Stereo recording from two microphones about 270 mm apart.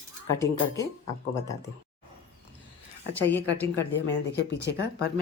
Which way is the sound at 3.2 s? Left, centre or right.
Centre.